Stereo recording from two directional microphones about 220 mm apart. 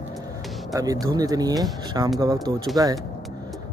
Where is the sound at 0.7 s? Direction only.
15° right (ahead or behind).